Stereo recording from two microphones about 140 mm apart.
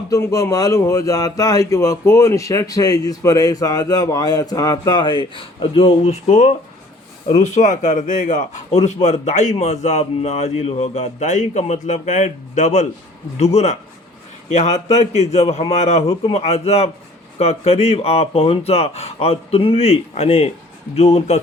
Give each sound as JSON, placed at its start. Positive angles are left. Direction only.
{"t": 0.1, "sound": "a man's voice", "side_deg": 20}